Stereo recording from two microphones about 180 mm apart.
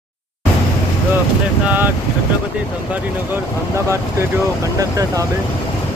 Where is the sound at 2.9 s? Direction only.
15° right (ahead or behind).